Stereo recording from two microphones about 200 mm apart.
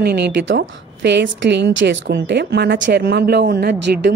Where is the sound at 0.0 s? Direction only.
55° right (ahead or behind).